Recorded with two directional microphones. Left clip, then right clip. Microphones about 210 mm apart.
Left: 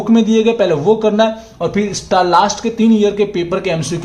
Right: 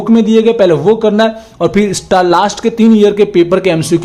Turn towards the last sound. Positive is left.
turn(degrees=-35)  # may be behind; listen again after turning